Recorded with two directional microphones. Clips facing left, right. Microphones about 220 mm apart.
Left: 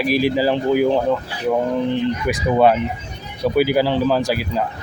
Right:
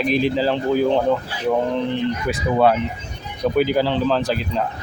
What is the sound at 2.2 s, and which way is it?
Speech, 15° left (ahead or behind).